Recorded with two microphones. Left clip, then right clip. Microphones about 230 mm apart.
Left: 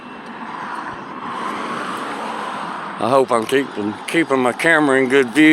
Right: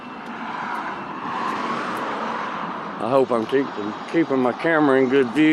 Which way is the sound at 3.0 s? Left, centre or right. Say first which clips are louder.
Left 4 dB; left.